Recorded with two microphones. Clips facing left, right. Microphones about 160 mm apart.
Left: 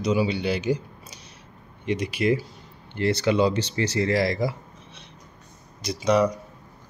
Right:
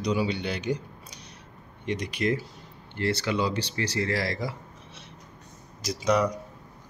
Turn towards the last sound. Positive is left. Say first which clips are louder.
# left 3 dB
turn(degrees=0)  # may be behind; listen again after turning